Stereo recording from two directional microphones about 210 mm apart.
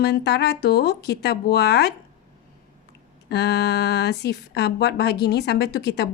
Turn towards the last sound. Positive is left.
turn(degrees=50)  # may be behind; listen again after turning